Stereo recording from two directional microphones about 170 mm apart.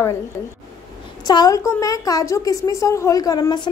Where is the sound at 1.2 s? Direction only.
20° left (ahead or behind).